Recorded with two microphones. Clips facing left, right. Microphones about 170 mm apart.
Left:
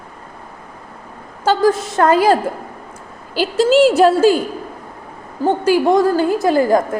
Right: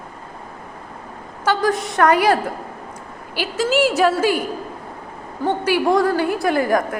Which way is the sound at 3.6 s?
30° left (ahead or behind).